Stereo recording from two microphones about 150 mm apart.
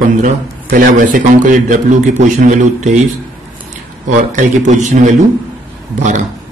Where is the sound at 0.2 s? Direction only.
60° right (ahead or behind).